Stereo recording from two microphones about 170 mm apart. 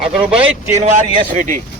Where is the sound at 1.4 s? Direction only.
50° right (ahead or behind).